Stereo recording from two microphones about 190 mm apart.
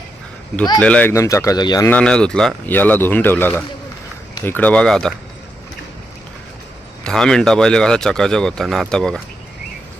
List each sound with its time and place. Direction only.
0.8 s speech: 5° left (ahead or behind)
1.9 s speech: 5° left (ahead or behind)
7.0 s speech: 5° left (ahead or behind)